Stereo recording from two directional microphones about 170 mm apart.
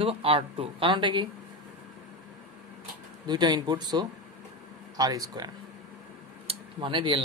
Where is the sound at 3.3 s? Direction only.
25° right (ahead or behind).